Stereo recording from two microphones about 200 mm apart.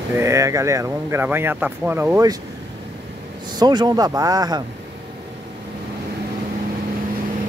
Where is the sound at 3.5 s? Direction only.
20° right (ahead or behind).